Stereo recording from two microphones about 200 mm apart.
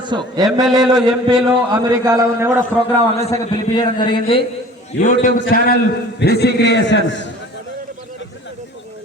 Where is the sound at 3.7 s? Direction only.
25° left (ahead or behind).